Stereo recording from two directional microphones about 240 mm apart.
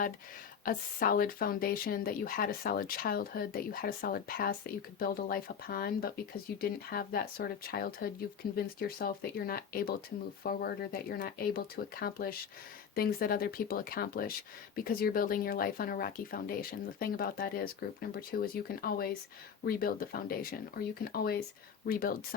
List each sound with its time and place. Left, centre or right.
0.6 s speech: left